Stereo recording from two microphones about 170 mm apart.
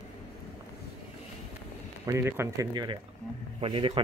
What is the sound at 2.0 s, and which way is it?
Speech, 15° right (ahead or behind).